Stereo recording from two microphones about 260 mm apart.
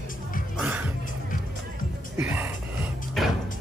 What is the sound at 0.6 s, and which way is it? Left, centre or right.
Music, centre.